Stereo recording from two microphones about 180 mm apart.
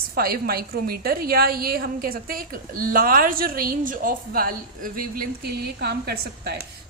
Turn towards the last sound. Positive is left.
turn(degrees=-60)  # may be behind; listen again after turning